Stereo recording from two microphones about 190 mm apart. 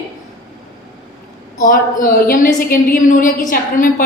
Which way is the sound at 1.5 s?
45° left (ahead or behind).